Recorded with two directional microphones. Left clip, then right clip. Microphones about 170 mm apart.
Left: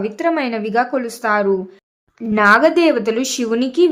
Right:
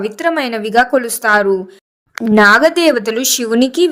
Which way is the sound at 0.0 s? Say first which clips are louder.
Right 2 dB; 35° right (ahead or behind).